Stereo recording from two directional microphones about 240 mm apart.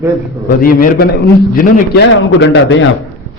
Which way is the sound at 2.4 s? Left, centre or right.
Left.